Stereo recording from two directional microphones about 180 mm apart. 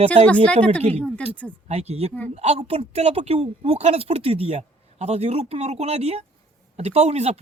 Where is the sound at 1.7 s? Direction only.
35° right (ahead or behind).